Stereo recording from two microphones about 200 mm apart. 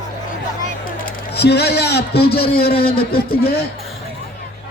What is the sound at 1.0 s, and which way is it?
A man's voice, 55° left (ahead or behind).